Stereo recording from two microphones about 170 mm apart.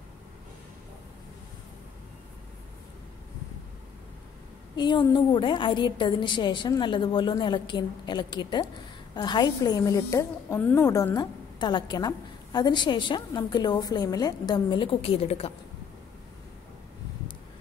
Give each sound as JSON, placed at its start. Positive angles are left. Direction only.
{"t": 4.7, "sound": "a woman's voice", "side_deg": 25}